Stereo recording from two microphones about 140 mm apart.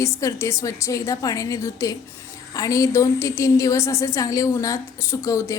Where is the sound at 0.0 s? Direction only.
20° left (ahead or behind).